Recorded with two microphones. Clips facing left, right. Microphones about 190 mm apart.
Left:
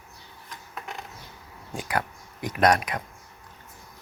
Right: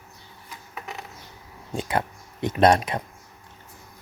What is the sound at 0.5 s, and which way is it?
Mechanisms, 5° right (ahead or behind).